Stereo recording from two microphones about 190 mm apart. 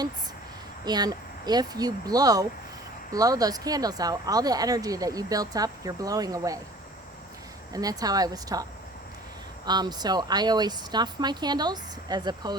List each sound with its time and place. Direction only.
0.9 s speech: 20° right (ahead or behind)
7.7 s speech: 20° right (ahead or behind)
9.6 s speech: 20° right (ahead or behind)